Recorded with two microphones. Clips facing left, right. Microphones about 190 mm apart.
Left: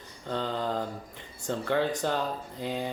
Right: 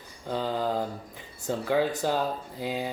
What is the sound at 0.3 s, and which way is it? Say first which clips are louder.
Speech: right 2 dB; 5° right (ahead or behind).